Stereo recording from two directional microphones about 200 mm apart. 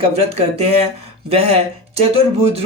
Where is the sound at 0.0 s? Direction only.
30° right (ahead or behind).